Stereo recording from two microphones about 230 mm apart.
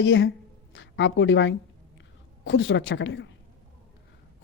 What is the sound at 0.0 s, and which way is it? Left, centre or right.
Speech, left.